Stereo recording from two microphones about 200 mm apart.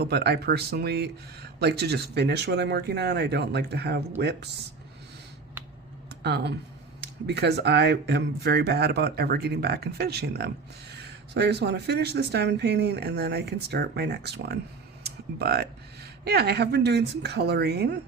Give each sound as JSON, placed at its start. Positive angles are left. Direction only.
{"t": 0.0, "sound": "speech", "side_deg": -55}
{"t": 6.1, "sound": "a sound", "side_deg": -55}
{"t": 7.0, "sound": "speech", "side_deg": -55}